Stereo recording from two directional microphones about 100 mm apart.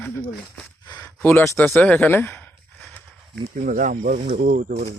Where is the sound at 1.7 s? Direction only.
15° left (ahead or behind).